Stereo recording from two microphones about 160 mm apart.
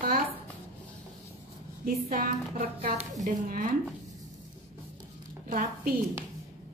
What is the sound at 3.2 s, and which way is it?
Speech, 55° right (ahead or behind).